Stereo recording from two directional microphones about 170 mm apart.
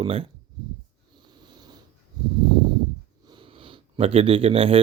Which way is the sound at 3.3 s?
30° right (ahead or behind).